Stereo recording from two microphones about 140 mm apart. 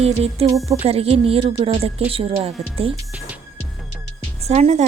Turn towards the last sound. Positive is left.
turn(degrees=-50)  # may be behind; listen again after turning